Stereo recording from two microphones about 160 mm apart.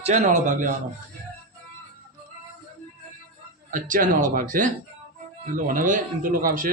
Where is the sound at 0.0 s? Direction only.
45° right (ahead or behind).